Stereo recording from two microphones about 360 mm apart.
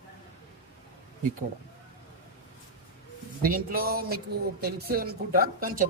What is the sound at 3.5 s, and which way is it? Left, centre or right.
Speech, right.